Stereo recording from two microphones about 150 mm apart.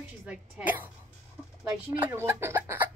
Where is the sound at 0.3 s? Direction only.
10° right (ahead or behind).